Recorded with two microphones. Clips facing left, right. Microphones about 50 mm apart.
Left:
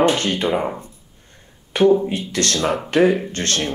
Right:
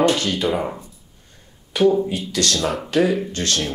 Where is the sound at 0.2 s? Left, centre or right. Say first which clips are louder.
Left 1 dB; left.